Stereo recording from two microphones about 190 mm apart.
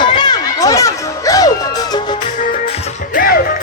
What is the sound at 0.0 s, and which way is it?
Music, 25° left (ahead or behind).